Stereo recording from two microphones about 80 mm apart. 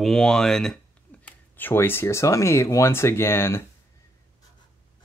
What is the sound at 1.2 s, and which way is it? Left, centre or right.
Speech, left.